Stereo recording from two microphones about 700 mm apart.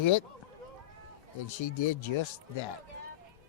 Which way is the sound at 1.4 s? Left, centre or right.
Left.